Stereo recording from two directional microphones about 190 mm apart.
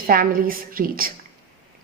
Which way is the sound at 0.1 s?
50° right (ahead or behind).